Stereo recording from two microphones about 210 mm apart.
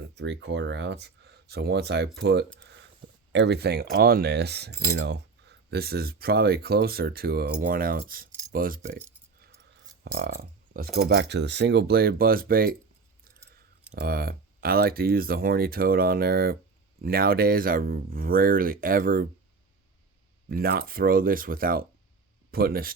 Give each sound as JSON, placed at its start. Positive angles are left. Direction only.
{"t": 0.2, "sound": "speech", "side_deg": -60}
{"t": 2.6, "sound": "a sound", "side_deg": -60}
{"t": 3.3, "sound": "speech", "side_deg": -55}
{"t": 4.7, "sound": "a sound", "side_deg": 10}
{"t": 4.9, "sound": "speech", "side_deg": -55}
{"t": 8.3, "sound": "filing", "side_deg": -15}
{"t": 8.5, "sound": "speech", "side_deg": -40}
{"t": 13.2, "sound": "chewing", "side_deg": -45}
{"t": 13.9, "sound": "speech", "side_deg": -45}
{"t": 20.5, "sound": "speech", "side_deg": -45}